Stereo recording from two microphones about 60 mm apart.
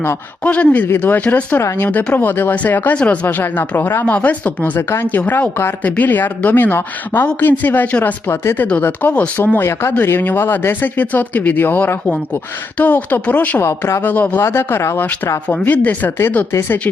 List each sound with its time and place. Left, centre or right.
0.4 s speech: left
4.0 s speech: left
4.8 s speech: left
5.0 s speech: left
9.4 s speech: left
13.6 s speech: left
14.0 s speech: left
14.4 s speech: left
15.6 s speech: left
16.5 s speech: left